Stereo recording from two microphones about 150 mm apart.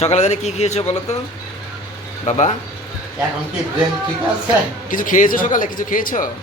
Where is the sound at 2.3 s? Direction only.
55° left (ahead or behind).